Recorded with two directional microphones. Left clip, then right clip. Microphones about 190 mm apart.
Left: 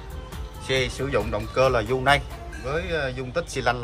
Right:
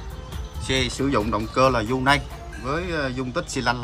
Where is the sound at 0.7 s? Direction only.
10° right (ahead or behind).